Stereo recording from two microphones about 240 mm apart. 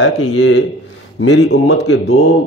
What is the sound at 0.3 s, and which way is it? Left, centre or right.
A man's voice, left.